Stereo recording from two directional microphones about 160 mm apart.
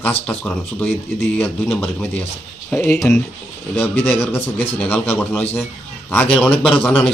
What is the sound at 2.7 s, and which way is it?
Speech, 10° left (ahead or behind).